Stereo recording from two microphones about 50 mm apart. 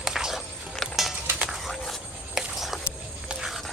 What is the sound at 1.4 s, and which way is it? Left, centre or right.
Bird, centre.